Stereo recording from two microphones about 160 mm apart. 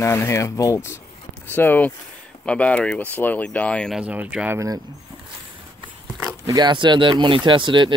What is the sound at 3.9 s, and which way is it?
Speech, 10° right (ahead or behind).